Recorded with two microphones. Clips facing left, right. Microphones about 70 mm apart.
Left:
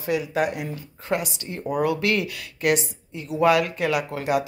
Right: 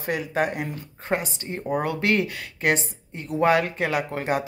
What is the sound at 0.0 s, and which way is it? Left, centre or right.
Speech, right.